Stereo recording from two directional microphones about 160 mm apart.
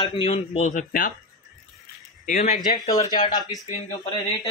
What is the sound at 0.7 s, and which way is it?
Speech, 55° left (ahead or behind).